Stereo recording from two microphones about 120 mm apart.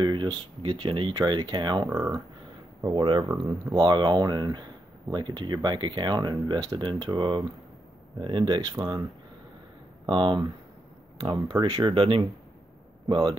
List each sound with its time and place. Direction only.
0.0 s speech: 40° right (ahead or behind)
1.9 s speech: 25° right (ahead or behind)
2.9 s speech: 45° right (ahead or behind)
10.0 s speech: 45° right (ahead or behind)
11.6 s speech: 45° right (ahead or behind)